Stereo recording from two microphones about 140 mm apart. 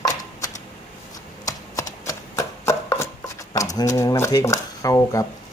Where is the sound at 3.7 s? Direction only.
20° left (ahead or behind).